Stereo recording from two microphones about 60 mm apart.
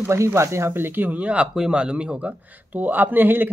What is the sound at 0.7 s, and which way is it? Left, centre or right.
Speech, right.